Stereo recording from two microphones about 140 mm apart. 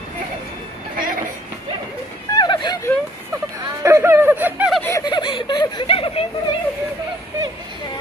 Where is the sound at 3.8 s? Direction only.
20° right (ahead or behind).